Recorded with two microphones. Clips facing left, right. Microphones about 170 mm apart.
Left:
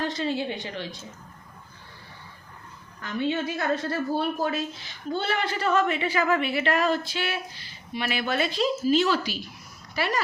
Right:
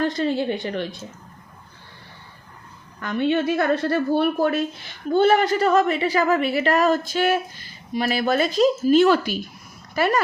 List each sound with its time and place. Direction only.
0.2 s a woman's voice: 55° right (ahead or behind)
3.0 s a woman's voice: 65° right (ahead or behind)